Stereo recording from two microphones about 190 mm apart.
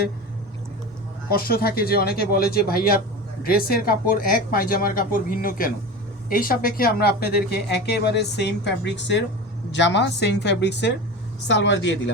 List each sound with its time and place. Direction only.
1.3 s speech: 50° left (ahead or behind); by 12.1 s 70° left (ahead or behind)